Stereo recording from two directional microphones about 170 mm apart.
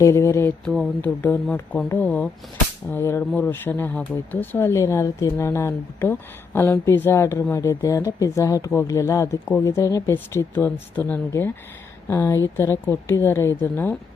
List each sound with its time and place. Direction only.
0.0 s speech: 15° left (ahead or behind)
0.6 s speech: 5° left (ahead or behind)